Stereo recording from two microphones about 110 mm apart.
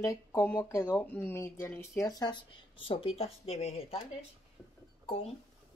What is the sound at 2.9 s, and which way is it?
Speech, 60° left (ahead or behind).